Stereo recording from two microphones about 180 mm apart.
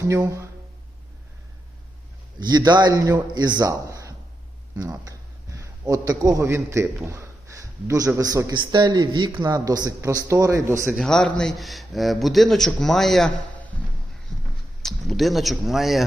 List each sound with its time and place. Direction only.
0.0 s speech: 15° right (ahead or behind)
2.4 s a man's voice: 25° right (ahead or behind)
10.9 s a man's voice: 5° left (ahead or behind)
14.3 s a sound: 5° left (ahead or behind)
14.8 s speech: centre (ahead or behind)